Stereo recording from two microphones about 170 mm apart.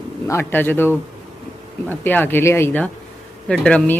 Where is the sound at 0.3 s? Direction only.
15° left (ahead or behind).